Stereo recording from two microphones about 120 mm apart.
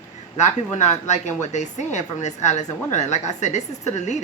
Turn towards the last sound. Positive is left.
turn(degrees=75)  # may be behind; listen again after turning